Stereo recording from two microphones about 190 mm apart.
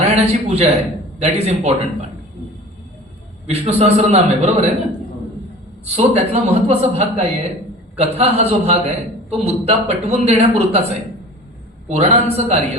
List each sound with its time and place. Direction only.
0.0 s a man's voice: 35° right (ahead or behind)
3.4 s a man's voice: 35° right (ahead or behind)
5.8 s a man's voice: 35° right (ahead or behind)
11.9 s a man's voice: 35° right (ahead or behind)